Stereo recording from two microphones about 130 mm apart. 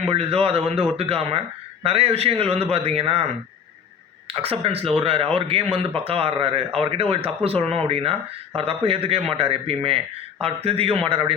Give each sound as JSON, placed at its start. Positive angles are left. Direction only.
{"t": 0.1, "sound": "a man's voice", "side_deg": -45}
{"t": 4.3, "sound": "a man's voice", "side_deg": -50}